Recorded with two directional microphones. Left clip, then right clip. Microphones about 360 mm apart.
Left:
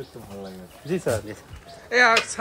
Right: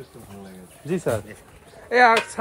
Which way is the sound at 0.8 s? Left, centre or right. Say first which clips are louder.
Even; right.